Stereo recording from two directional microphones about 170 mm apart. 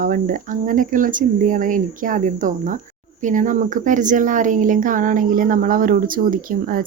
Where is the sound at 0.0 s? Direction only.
50° right (ahead or behind).